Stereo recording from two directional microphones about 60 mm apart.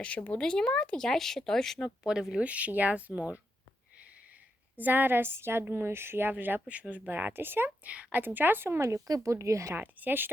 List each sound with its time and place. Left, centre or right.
0.0 s speech: left; by 1.9 s centre
2.0 s speech: centre
2.5 s speech: right
4.8 s a woman's voice: right
7.9 s speech: right
8.2 s a woman's voice: right
8.9 s speech: right
9.3 s speech: right
9.7 s a woman's voice: right